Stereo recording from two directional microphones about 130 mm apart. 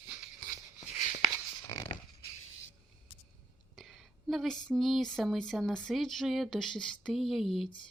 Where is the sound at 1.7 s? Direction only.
40° left (ahead or behind).